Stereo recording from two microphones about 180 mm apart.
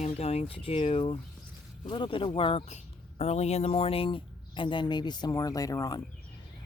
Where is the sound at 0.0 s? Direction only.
35° left (ahead or behind).